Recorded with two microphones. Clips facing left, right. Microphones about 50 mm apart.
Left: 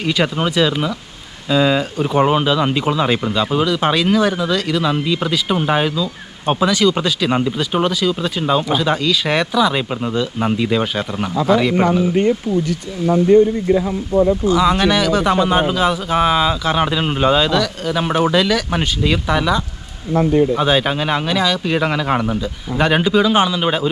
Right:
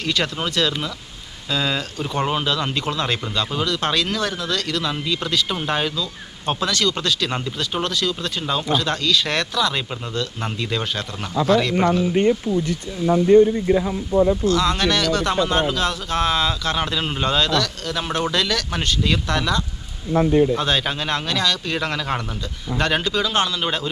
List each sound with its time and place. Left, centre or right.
0.0 s speech: centre
13.3 s speech: left
14.4 s speech: centre